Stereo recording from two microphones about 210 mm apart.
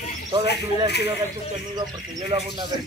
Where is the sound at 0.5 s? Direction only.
50° left (ahead or behind).